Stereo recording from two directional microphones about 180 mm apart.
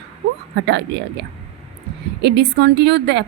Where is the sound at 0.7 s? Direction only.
75° right (ahead or behind).